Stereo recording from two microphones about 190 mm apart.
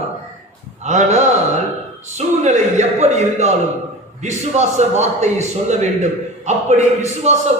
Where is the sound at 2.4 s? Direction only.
35° right (ahead or behind).